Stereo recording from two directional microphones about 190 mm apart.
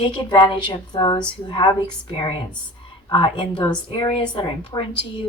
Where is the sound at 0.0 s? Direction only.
25° left (ahead or behind).